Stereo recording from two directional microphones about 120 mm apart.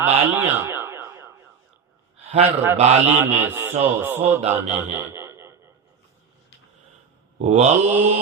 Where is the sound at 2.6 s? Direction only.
15° right (ahead or behind).